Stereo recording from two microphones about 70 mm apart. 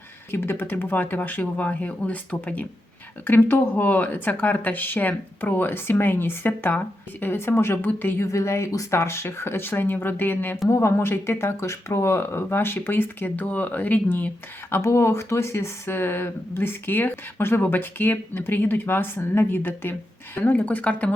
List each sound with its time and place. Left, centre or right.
0.3 s speech: left; by 2.6 s centre
3.2 s speech: left
8.3 s speech: left
10.7 s speech: left
14.8 s speech: left